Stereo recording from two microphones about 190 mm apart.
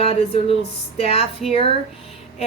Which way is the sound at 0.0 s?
30° left (ahead or behind).